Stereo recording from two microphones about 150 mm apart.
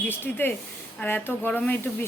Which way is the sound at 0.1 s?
15° left (ahead or behind).